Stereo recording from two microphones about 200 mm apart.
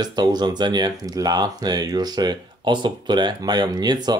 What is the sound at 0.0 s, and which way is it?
Speech, 20° right (ahead or behind).